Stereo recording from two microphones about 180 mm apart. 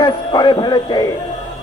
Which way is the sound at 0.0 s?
25° left (ahead or behind).